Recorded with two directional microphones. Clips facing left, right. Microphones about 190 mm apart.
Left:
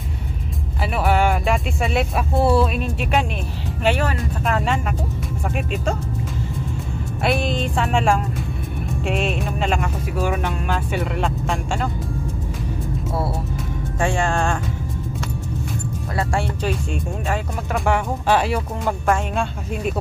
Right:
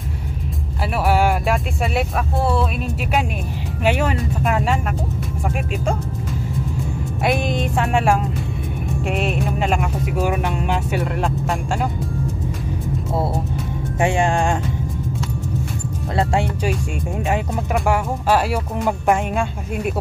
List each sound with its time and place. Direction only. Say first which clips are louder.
1.0 s speech: right 1 dB; 5° right (ahead or behind)
3.8 s speech: right 1 dB; 15° right (ahead or behind)
7.2 s speech: right 1 dB; 15° right (ahead or behind)
13.9 s speech: right 3 dB; 20° right (ahead or behind)
16.2 s speech: right 4 dB; 20° right (ahead or behind)
17.7 s speech: even; 5° right (ahead or behind)
18.9 s speech: right 2 dB; 15° right (ahead or behind)